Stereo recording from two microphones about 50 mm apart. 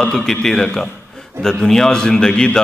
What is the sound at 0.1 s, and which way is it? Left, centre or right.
A man's voice, centre.